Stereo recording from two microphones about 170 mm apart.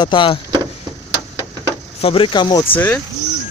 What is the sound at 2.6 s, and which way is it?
Speech, 10° left (ahead or behind).